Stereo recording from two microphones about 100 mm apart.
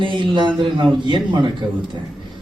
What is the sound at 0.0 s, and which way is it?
Speech, 55° right (ahead or behind).